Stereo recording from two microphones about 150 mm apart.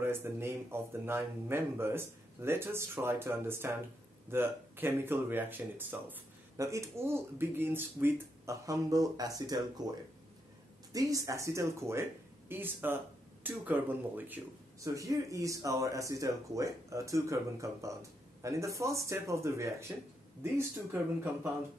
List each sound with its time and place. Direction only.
0.0 s speech: 15° right (ahead or behind)